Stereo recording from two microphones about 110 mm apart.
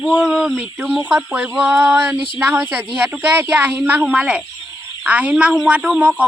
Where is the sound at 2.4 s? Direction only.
15° right (ahead or behind).